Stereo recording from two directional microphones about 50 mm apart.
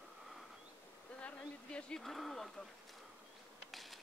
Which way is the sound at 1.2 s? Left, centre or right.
Left.